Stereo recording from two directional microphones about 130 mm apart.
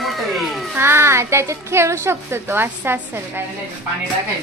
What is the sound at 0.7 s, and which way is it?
A woman's voice, 20° right (ahead or behind).